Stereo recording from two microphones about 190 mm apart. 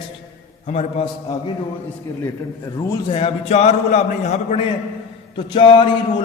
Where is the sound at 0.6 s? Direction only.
35° left (ahead or behind).